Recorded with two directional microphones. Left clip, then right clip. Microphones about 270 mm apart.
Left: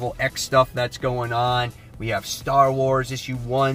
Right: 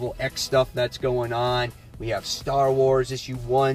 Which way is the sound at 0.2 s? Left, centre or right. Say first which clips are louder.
Left 4 dB; centre.